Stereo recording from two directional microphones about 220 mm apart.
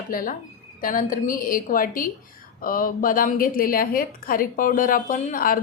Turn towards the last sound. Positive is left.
turn(degrees=40)  # may be behind; listen again after turning